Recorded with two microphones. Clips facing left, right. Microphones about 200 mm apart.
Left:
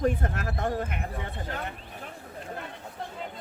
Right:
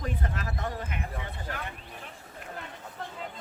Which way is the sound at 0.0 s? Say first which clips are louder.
Left 7 dB; 50° left (ahead or behind).